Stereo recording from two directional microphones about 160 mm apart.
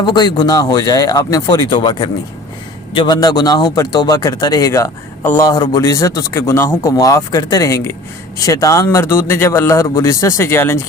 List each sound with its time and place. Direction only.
0.0 s a man's voice: 25° left (ahead or behind)